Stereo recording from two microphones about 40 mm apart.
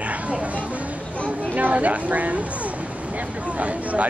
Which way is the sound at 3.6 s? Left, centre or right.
Right.